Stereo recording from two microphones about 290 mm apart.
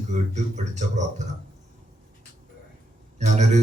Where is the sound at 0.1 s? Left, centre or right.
Right.